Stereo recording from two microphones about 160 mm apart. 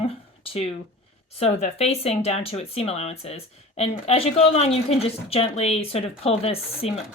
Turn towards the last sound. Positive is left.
turn(degrees=40)  # may be behind; listen again after turning